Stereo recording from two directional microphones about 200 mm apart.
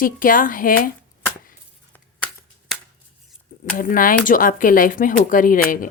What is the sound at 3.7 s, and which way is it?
Speech, 45° left (ahead or behind).